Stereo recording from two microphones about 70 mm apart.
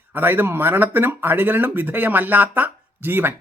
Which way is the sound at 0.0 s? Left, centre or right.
Right.